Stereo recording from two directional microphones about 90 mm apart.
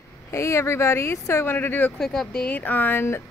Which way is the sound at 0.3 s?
30° left (ahead or behind).